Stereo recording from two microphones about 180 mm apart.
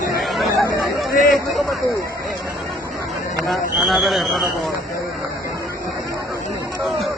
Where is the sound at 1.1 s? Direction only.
50° left (ahead or behind).